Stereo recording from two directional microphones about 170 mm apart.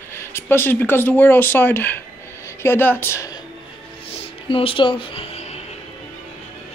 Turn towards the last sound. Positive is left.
turn(degrees=40)  # may be behind; listen again after turning